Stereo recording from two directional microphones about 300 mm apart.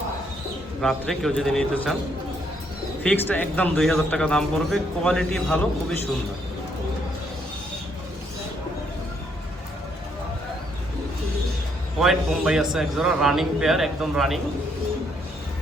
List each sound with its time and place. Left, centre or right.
0.8 s a man's voice: centre
3.0 s a man's voice: centre
11.9 s a man's voice: centre